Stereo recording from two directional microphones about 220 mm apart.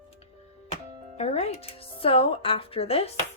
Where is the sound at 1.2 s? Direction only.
30° left (ahead or behind).